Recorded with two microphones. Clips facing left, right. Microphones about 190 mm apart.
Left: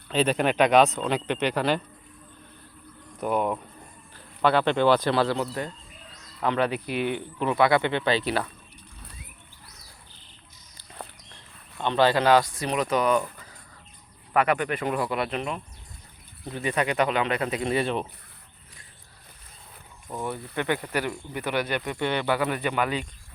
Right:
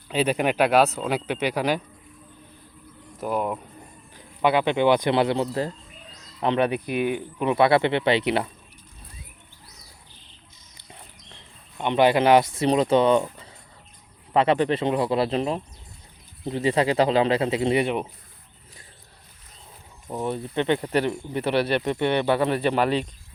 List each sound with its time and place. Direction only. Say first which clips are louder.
0.1 s speech: right 1 dB; 10° right (ahead or behind)
3.2 s speech: left 1 dB; 5° right (ahead or behind)
4.1 s speech: right 1 dB; 15° right (ahead or behind)
11.8 s speech: right 3 dB; 20° right (ahead or behind)
20.1 s speech: right 4 dB; 20° right (ahead or behind)